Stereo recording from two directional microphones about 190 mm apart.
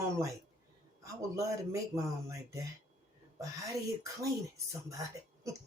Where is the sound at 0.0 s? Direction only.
15° right (ahead or behind).